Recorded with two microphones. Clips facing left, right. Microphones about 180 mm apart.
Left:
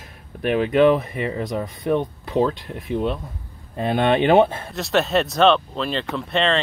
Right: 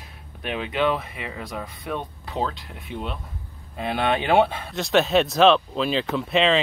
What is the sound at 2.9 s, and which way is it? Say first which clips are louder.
Speech: left 9 dB; 35° left (ahead or behind).